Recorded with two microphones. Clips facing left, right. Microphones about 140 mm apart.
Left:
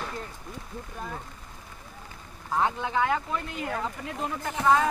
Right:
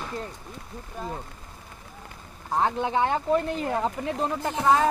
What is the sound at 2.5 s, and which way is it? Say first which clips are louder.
Speech: right 2 dB; 30° right (ahead or behind).